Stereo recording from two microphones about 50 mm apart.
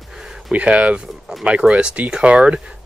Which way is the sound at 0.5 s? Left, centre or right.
Right.